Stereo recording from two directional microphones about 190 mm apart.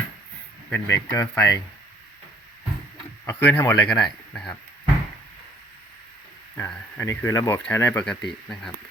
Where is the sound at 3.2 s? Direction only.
10° left (ahead or behind).